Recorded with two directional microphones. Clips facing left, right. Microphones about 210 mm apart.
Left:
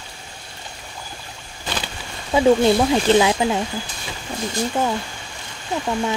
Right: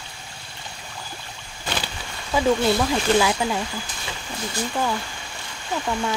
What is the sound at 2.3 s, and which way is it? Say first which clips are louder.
Speech: left 5 dB; 25° left (ahead or behind).